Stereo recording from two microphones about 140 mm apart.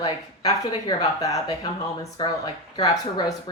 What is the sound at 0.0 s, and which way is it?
A woman's voice, 30° left (ahead or behind).